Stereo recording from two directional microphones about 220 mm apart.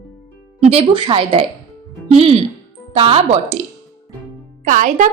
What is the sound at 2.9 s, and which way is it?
Speech, 25° right (ahead or behind).